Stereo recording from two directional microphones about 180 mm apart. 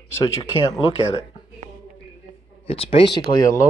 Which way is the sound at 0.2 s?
20° left (ahead or behind).